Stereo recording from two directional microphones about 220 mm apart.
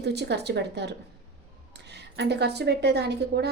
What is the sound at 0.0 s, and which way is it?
Speech, 50° right (ahead or behind).